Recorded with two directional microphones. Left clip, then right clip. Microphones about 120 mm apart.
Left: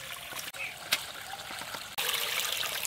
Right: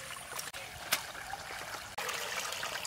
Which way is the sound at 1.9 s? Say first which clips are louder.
Left 6 dB; 15° left (ahead or behind).